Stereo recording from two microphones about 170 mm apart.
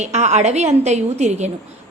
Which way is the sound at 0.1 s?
40° right (ahead or behind).